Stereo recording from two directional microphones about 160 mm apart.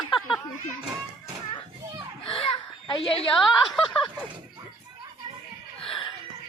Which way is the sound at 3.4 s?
Centre (ahead or behind).